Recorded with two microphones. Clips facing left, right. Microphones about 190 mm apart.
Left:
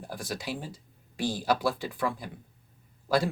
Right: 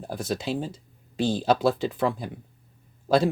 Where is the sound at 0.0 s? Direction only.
25° right (ahead or behind).